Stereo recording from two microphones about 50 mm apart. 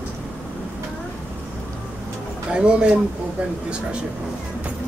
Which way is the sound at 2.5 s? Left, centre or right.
Centre.